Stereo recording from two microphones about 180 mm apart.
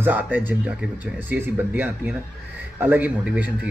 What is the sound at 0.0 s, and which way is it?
Speech, 10° right (ahead or behind).